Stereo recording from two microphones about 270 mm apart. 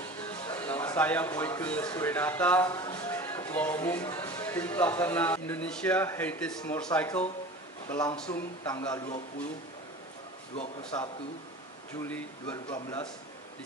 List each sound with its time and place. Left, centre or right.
0.6 s speech: centre
10.5 s a man's voice: centre
12.0 s speech: centre